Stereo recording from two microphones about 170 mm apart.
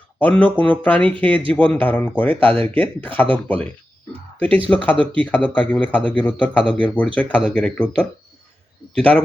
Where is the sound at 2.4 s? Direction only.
30° right (ahead or behind).